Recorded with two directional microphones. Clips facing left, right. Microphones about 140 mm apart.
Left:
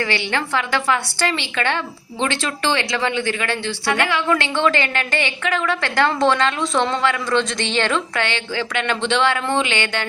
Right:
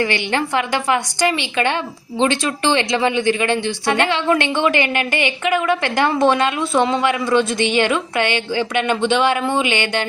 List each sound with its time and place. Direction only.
0.0 s a woman's voice: 15° right (ahead or behind)